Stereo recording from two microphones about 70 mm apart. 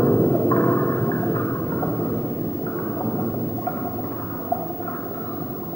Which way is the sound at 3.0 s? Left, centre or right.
Centre.